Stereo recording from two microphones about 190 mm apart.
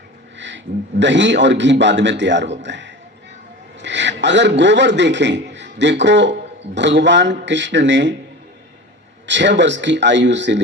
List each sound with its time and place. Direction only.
0.3 s a man's voice: 70° right (ahead or behind)
9.2 s a man's voice: 70° right (ahead or behind)